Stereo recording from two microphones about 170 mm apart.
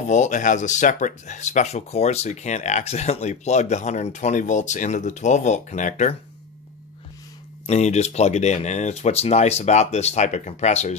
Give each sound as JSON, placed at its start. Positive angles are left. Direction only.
{"t": 0.1, "sound": "speech", "side_deg": 45}
{"t": 7.6, "sound": "speech", "side_deg": 40}